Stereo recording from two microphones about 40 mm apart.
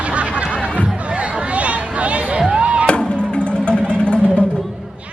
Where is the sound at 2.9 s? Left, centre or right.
Left.